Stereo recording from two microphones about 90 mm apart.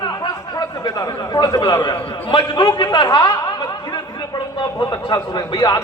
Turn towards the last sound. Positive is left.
turn(degrees=50)  # may be behind; listen again after turning